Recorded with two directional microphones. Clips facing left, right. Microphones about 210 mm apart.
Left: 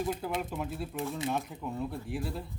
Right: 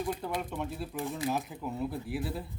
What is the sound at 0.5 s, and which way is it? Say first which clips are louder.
Speech: even; centre (ahead or behind).